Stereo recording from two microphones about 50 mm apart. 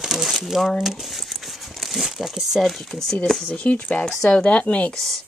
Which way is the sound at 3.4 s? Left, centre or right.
Left.